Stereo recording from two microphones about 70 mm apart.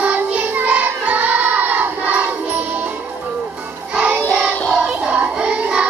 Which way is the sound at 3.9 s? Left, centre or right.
Centre.